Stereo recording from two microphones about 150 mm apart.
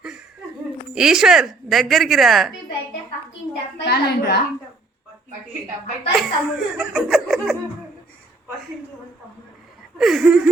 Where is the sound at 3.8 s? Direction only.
90° left.